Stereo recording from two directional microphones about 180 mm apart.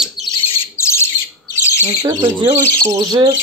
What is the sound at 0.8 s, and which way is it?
Bird, 15° left (ahead or behind).